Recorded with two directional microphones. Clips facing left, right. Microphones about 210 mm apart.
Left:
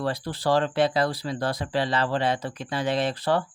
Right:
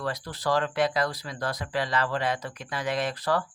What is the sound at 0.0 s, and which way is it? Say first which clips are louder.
Speech: left 4 dB; 30° left (ahead or behind).